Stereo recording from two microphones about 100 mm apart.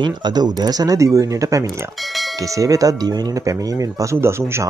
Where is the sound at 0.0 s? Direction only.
45° right (ahead or behind).